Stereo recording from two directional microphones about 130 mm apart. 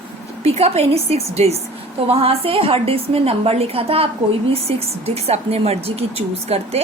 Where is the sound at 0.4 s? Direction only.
55° right (ahead or behind).